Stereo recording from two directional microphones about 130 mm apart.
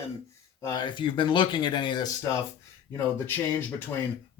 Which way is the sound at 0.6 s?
35° left (ahead or behind).